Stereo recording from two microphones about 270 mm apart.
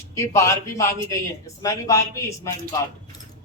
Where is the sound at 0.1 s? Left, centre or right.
Centre.